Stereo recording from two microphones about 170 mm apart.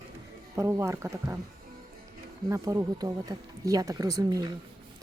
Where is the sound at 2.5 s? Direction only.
20° right (ahead or behind).